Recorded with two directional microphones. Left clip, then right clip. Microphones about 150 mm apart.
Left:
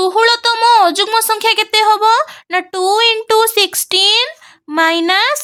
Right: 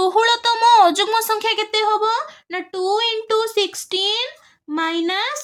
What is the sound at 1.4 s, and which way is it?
A woman's voice, 40° left (ahead or behind).